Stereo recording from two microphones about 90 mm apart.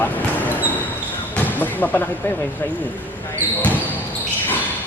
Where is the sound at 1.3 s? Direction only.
20° left (ahead or behind).